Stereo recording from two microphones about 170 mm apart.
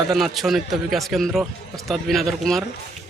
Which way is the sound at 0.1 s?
Centre (ahead or behind).